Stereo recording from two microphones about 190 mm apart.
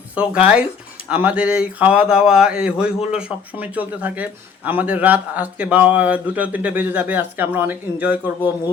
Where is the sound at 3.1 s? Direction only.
5° right (ahead or behind).